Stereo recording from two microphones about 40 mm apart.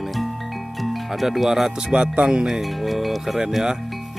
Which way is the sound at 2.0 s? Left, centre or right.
Right.